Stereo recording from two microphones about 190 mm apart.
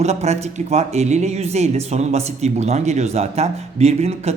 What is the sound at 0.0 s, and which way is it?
Speech, 35° right (ahead or behind).